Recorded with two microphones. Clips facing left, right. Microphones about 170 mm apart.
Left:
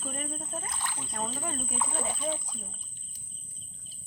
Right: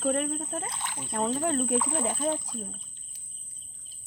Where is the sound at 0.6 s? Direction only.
30° right (ahead or behind).